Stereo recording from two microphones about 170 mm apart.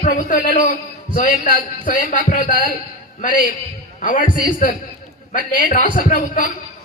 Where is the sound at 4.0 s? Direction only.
50° left (ahead or behind).